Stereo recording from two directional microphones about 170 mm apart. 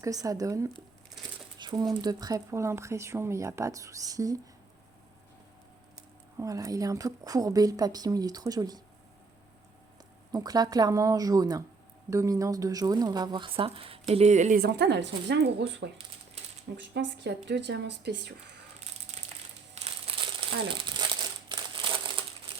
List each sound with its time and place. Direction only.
0.0 s speech: 20° right (ahead or behind)
6.3 s speech: 20° right (ahead or behind)
10.3 s speech: 20° right (ahead or behind); by 14.6 s 45° right (ahead or behind)
14.6 s speech: 80° right
19.7 s crumpling: 35° right (ahead or behind)